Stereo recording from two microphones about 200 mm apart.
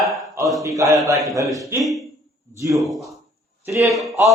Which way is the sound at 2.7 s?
Centre (ahead or behind).